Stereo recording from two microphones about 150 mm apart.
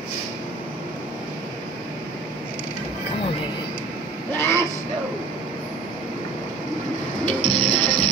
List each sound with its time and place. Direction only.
4.4 s vehicle: 20° left (ahead or behind)
7.4 s music: 40° left (ahead or behind)